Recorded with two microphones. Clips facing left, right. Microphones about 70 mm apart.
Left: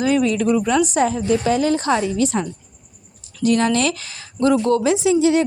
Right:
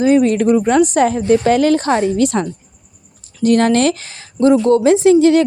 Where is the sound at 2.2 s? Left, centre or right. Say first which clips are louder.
Right 4 dB; right.